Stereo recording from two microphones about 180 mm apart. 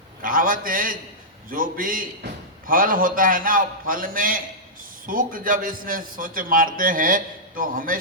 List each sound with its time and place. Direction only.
0.2 s a man's voice: 50° right (ahead or behind)